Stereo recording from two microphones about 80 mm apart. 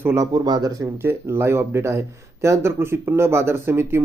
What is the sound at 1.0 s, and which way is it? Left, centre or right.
Speech, right.